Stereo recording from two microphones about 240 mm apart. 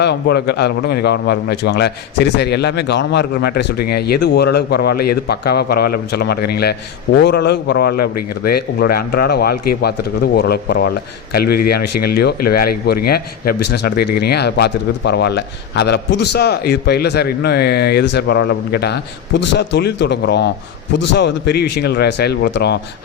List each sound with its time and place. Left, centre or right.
0.0 s a man's voice: left